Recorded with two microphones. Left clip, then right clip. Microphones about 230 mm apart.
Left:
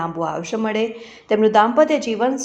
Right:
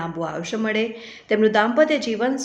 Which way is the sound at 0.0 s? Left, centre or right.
Centre.